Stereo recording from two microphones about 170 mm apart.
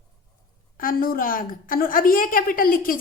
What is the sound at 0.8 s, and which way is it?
A woman's voice, 55° left (ahead or behind).